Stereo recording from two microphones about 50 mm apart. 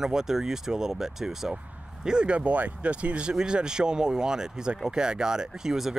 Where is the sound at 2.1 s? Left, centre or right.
Centre.